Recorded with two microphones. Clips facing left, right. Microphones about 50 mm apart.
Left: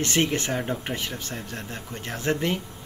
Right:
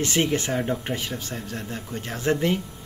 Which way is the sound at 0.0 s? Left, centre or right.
Centre.